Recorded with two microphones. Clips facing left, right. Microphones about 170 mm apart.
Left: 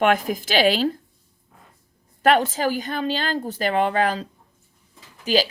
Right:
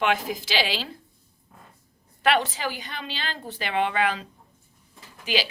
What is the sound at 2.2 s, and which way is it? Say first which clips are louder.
A woman's voice: left 5 dB; 45° left (ahead or behind).